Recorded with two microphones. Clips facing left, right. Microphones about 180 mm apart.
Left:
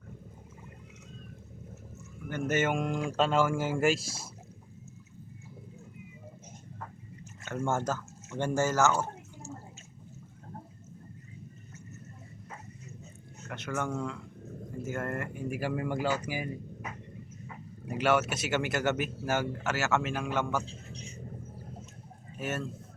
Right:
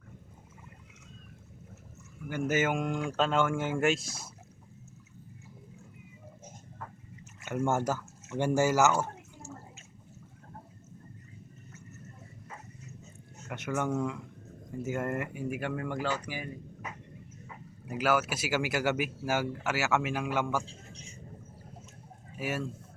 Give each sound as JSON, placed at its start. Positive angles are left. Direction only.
{"t": 2.3, "sound": "speech", "side_deg": -5}
{"t": 7.4, "sound": "speech", "side_deg": -10}
{"t": 13.5, "sound": "speech", "side_deg": -15}
{"t": 15.4, "sound": "speech", "side_deg": 0}
{"t": 17.8, "sound": "speech", "side_deg": -5}
{"t": 22.4, "sound": "speech", "side_deg": -10}